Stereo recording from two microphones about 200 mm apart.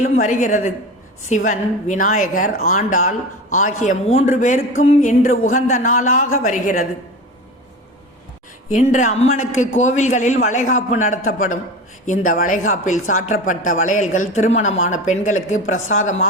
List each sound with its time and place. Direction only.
0.0 s speech: 40° left (ahead or behind)
8.7 s speech: 35° left (ahead or behind)